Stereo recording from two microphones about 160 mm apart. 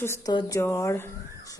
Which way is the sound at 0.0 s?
15° left (ahead or behind).